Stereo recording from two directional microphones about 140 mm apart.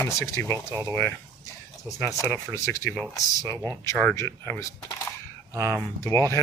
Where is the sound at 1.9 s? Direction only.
20° left (ahead or behind).